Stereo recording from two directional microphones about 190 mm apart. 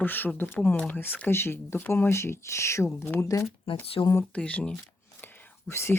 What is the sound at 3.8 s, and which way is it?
Speech, 30° left (ahead or behind).